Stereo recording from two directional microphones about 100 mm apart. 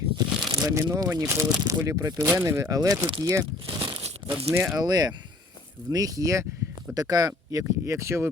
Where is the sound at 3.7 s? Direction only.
55° right (ahead or behind).